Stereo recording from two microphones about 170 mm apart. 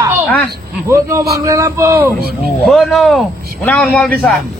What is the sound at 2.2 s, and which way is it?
Speech, 65° right (ahead or behind).